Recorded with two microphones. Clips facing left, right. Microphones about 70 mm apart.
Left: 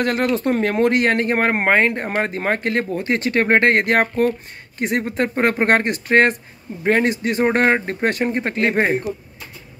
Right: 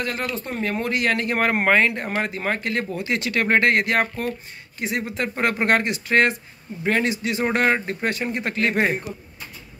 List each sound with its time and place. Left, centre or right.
0.0 s speech: left